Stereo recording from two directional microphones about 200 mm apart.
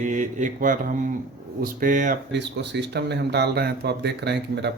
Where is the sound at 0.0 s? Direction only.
40° right (ahead or behind).